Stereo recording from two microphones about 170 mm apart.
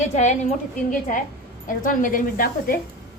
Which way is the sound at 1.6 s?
50° left (ahead or behind).